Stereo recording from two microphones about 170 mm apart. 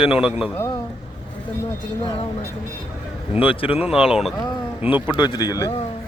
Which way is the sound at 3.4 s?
30° left (ahead or behind).